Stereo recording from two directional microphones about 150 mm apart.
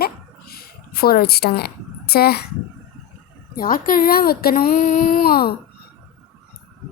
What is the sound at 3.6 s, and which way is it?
Speech, 70° left (ahead or behind).